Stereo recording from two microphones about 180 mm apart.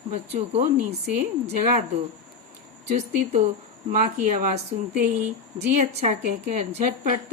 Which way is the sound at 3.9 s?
50° right (ahead or behind).